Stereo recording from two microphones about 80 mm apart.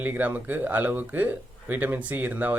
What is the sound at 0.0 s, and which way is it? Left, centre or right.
Speech, right.